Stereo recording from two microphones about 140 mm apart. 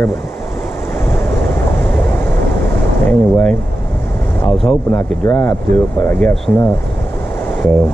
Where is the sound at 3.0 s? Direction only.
10° left (ahead or behind).